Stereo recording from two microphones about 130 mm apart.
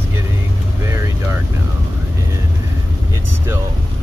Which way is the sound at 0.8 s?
20° right (ahead or behind).